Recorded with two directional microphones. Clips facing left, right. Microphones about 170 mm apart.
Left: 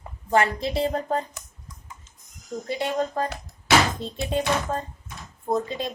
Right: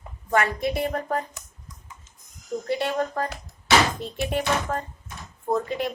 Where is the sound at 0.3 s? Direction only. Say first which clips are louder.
Left 1 dB; 30° left (ahead or behind).